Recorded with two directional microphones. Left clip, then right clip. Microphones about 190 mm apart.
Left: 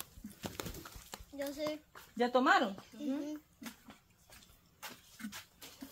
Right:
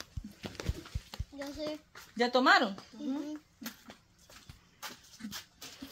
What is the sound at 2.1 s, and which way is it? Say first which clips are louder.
Speech: right 4 dB; 30° right (ahead or behind).